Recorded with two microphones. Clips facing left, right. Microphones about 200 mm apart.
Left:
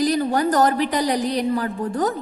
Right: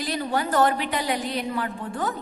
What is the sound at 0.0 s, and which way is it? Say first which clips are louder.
A woman's voice: left 7 dB; 40° left (ahead or behind).